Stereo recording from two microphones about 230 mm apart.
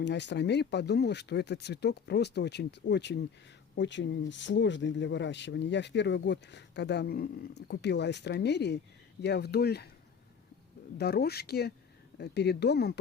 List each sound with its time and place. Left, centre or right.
0.0 s speech: left
10.9 s speech: left